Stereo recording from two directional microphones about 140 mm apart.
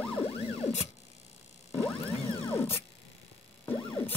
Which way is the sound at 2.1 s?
45° left (ahead or behind).